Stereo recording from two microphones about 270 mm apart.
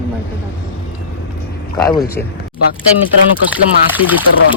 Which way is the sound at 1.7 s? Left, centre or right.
Centre.